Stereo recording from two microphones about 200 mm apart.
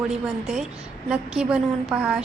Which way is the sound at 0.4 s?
Centre (ahead or behind).